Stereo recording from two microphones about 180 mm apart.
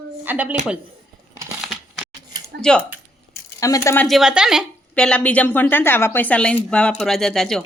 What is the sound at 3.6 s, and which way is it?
Speech, 20° left (ahead or behind).